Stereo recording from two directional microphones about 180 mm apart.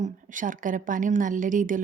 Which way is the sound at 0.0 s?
45° right (ahead or behind).